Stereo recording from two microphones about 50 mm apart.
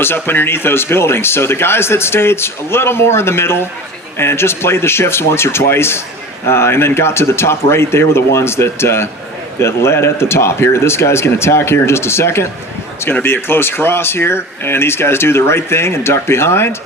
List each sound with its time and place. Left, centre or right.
0.0 s speech: left
13.2 s speech: left